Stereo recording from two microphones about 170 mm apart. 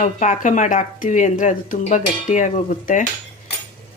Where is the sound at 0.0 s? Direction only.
45° left (ahead or behind).